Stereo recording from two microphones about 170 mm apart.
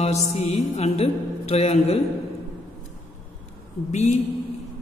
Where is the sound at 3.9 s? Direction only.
40° left (ahead or behind).